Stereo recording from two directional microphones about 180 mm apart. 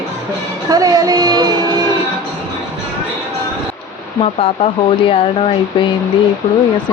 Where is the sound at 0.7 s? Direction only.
20° right (ahead or behind).